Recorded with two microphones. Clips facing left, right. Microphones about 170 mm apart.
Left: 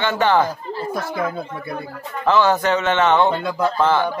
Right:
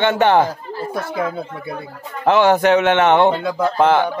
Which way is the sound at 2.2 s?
60° right (ahead or behind).